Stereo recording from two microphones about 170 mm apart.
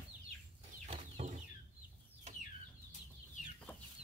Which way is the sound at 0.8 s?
40° right (ahead or behind).